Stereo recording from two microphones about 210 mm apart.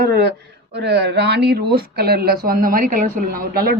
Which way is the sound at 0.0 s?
50° right (ahead or behind).